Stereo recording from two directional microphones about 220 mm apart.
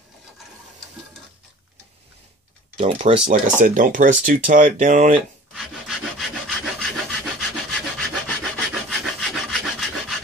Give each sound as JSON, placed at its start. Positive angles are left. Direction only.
{"t": 2.8, "sound": "speech", "side_deg": -30}
{"t": 5.5, "sound": "rub", "side_deg": 0}